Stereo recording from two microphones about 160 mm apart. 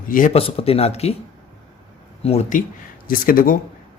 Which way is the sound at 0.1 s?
55° left (ahead or behind).